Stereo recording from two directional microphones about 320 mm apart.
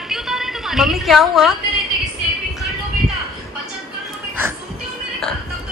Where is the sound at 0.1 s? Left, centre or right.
Centre.